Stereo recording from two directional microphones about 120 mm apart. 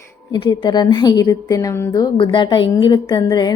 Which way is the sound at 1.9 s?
40° left (ahead or behind).